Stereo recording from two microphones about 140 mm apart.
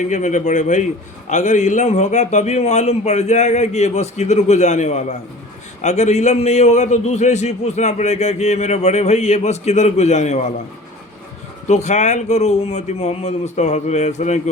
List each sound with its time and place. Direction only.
0.0 s a man's voice: 60° left (ahead or behind)
11.7 s a man's voice: 55° left (ahead or behind)